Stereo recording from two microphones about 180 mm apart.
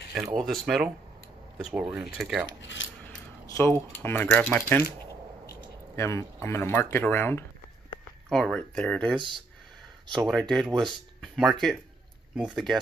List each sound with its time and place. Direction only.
0.1 s speech: 5° right (ahead or behind)
2.6 s speech: 90° left
3.5 s speech: 10° left (ahead or behind)
5.9 s speech: 15° left (ahead or behind)
10.1 s speech: centre (ahead or behind)
10.7 s speech: 25° right (ahead or behind)
11.1 s speech: centre (ahead or behind)